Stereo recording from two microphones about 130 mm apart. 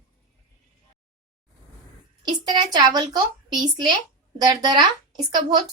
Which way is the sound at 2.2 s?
35° right (ahead or behind).